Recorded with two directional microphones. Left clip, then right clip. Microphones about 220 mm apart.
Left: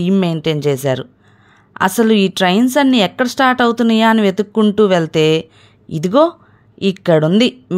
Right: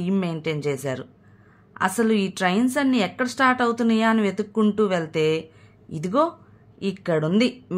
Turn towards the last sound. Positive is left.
turn(degrees=35)  # may be behind; listen again after turning